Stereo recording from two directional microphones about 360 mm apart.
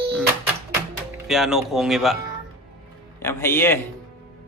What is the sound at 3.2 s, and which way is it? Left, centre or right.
Speech, centre.